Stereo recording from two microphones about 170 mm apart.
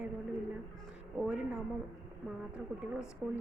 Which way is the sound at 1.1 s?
5° right (ahead or behind).